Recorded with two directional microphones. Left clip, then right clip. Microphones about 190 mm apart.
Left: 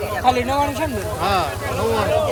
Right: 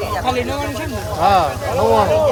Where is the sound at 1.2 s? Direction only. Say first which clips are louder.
Right 7 dB; 50° right (ahead or behind).